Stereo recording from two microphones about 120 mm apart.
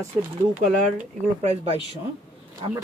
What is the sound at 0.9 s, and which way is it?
Speech, 65° right (ahead or behind).